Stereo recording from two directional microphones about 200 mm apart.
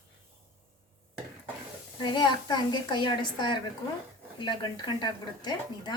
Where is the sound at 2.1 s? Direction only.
20° left (ahead or behind).